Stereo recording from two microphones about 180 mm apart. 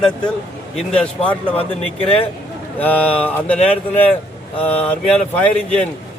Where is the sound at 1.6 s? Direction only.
35° left (ahead or behind).